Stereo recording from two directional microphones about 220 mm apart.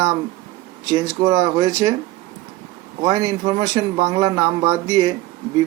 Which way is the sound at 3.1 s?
15° right (ahead or behind).